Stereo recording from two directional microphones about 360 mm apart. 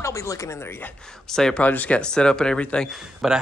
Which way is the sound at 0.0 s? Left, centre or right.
Centre.